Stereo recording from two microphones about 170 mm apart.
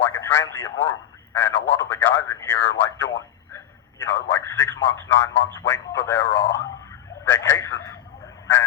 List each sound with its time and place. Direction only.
0.0 s radio: 15° left (ahead or behind)
1.4 s speech: 10° left (ahead or behind)